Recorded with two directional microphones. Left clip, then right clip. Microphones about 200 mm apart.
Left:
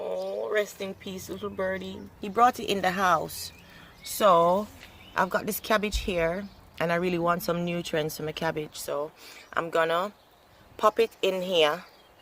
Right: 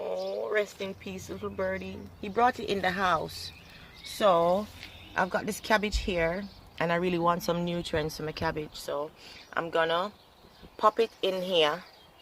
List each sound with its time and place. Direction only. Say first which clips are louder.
0.0 s speech: left 1 dB; 10° left (ahead or behind)